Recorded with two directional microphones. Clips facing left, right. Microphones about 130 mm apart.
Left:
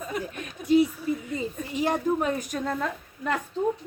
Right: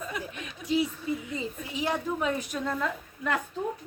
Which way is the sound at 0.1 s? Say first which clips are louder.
Left 4 dB; 45° left (ahead or behind).